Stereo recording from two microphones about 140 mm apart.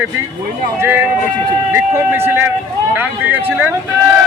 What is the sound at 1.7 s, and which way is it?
A man's voice, 15° right (ahead or behind).